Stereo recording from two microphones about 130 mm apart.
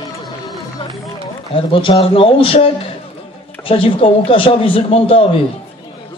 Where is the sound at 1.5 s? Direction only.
40° left (ahead or behind).